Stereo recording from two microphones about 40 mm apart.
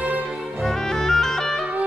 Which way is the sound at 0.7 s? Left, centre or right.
Centre.